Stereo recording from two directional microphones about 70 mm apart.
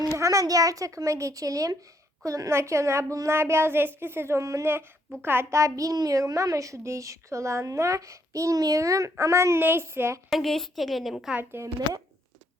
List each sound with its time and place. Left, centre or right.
0.2 s a child's voice: right
5.2 s a child's voice: right
9.6 s a woman's voice: right
10.2 s a woman's voice: centre
11.6 s a woman's voice: right